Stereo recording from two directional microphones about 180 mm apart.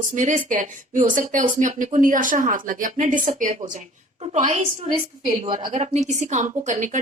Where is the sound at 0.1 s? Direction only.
45° right (ahead or behind).